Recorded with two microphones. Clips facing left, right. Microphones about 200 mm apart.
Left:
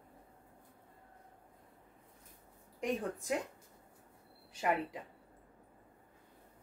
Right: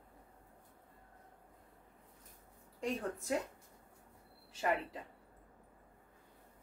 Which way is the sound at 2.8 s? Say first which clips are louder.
Left 2 dB; 15° left (ahead or behind).